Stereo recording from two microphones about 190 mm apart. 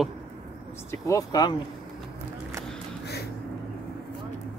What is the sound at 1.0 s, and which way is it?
Speech, 20° left (ahead or behind).